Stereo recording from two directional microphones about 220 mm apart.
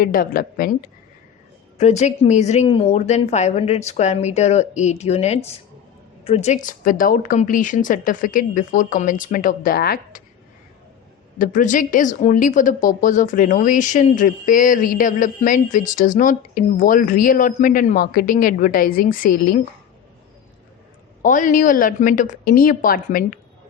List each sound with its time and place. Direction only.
0.0 s speech: 40° left (ahead or behind)
1.8 s speech: 30° left (ahead or behind)
11.3 s speech: 35° left (ahead or behind)
21.2 s speech: 35° left (ahead or behind)